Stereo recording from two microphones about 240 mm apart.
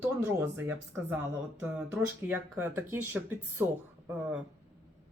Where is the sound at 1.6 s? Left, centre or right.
Centre.